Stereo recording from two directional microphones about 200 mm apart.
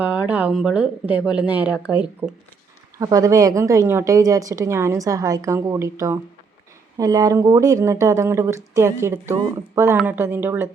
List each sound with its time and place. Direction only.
0.0 s a woman's voice: 5° right (ahead or behind)
3.0 s a woman's voice: 15° right (ahead or behind)